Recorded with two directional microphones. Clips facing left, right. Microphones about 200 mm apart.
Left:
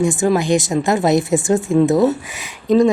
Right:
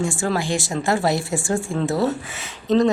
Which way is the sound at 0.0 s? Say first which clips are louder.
Left 7 dB; 20° left (ahead or behind).